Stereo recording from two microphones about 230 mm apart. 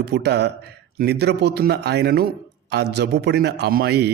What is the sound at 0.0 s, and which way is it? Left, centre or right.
A man's voice, right.